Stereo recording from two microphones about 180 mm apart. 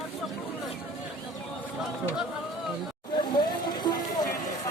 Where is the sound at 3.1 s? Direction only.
25° left (ahead or behind).